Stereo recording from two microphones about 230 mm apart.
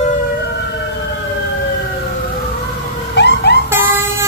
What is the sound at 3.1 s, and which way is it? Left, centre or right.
Emergency vehicle, left.